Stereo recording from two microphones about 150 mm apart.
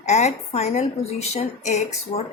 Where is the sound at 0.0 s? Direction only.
50° left (ahead or behind).